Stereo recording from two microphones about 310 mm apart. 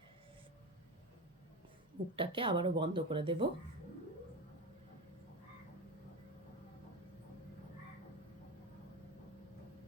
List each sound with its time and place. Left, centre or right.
2.1 s speech: centre